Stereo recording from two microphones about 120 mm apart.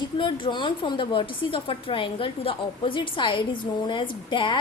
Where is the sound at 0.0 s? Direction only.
40° left (ahead or behind).